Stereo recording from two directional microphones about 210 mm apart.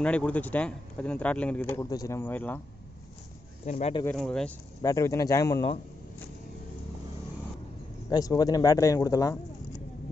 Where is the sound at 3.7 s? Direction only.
30° left (ahead or behind).